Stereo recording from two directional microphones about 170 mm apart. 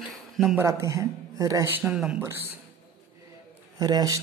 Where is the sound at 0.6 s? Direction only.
15° right (ahead or behind).